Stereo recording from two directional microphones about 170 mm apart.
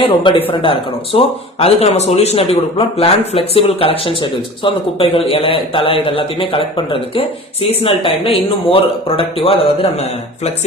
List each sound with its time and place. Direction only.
0.0 s speech: 30° left (ahead or behind)